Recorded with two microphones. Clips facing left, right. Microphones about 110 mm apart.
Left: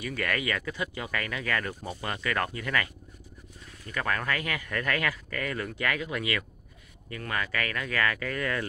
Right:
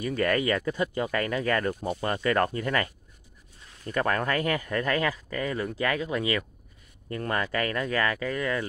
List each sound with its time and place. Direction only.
0.0 s speech: 30° right (ahead or behind)